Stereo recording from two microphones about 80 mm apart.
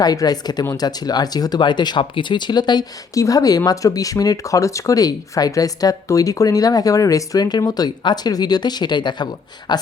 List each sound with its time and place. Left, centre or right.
0.0 s speech: left
3.2 s speech: left